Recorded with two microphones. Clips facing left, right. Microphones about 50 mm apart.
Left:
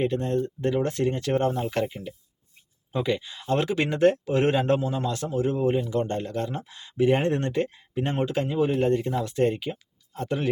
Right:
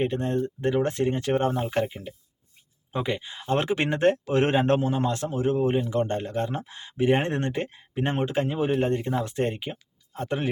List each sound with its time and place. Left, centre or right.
0.0 s speech: right
1.6 s speech: centre